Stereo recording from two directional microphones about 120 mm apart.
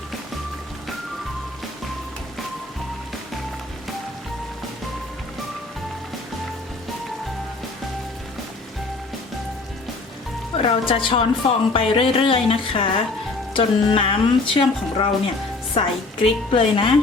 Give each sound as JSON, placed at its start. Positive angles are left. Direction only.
{"t": 10.6, "sound": "speech", "side_deg": 50}